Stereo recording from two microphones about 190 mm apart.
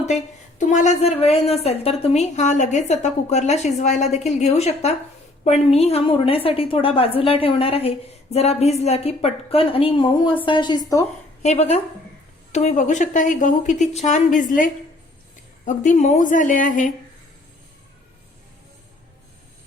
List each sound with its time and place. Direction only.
0.6 s a woman's voice: 40° left (ahead or behind); by 11.0 s 20° left (ahead or behind)
11.4 s a woman's voice: 35° left (ahead or behind)